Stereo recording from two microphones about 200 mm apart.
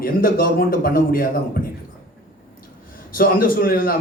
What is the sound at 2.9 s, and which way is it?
A man's voice, 45° left (ahead or behind).